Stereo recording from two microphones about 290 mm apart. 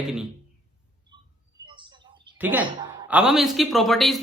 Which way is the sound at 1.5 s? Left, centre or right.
Centre.